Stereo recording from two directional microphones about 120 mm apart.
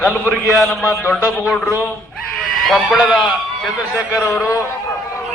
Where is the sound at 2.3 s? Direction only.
5° left (ahead or behind).